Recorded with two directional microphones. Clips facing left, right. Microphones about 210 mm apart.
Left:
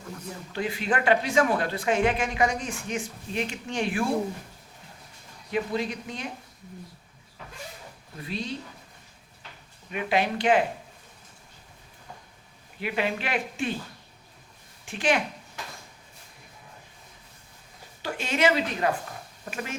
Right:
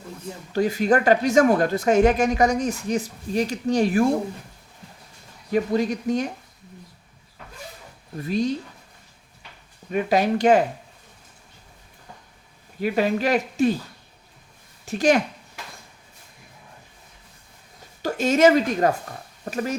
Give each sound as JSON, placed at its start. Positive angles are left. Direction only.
{"t": 0.5, "sound": "speech", "side_deg": -40}
{"t": 5.5, "sound": "speech", "side_deg": -45}
{"t": 9.9, "sound": "speech", "side_deg": -40}
{"t": 12.8, "sound": "speech", "side_deg": -40}
{"t": 14.8, "sound": "speech", "side_deg": -40}
{"t": 18.0, "sound": "speech", "side_deg": -40}